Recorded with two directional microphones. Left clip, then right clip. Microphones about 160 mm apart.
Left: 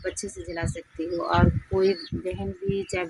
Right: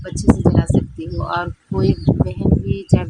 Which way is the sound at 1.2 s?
15° right (ahead or behind).